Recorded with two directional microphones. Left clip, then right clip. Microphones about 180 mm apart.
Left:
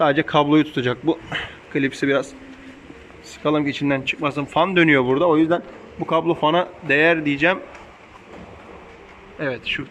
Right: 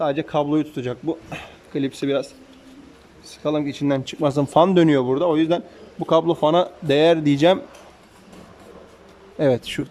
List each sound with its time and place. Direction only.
0.0 s a man's voice: 10° right (ahead or behind)
3.4 s speech: 15° right (ahead or behind)
9.4 s speech: 40° right (ahead or behind)